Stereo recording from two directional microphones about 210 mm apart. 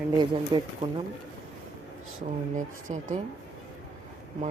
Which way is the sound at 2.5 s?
35° right (ahead or behind).